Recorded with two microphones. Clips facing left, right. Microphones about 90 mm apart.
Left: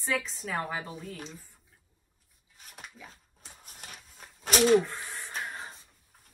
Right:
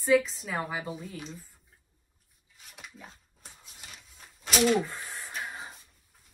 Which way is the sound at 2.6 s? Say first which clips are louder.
Even; 45° left (ahead or behind).